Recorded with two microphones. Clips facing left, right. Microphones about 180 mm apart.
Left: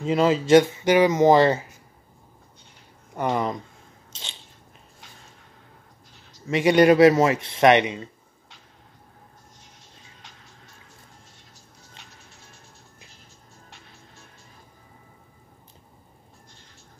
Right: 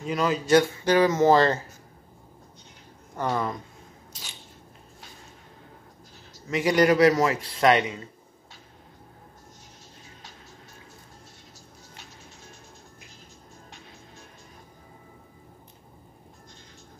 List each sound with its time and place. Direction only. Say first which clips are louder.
0.0 s speech: left 5 dB; 25° left (ahead or behind)
3.2 s speech: left 3 dB; 20° left (ahead or behind)
4.1 s biting: left 4 dB; 25° left (ahead or behind)
6.5 s a man's voice: left 4 dB; 25° left (ahead or behind)